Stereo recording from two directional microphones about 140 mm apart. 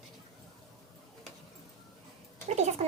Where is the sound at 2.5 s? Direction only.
55° right (ahead or behind).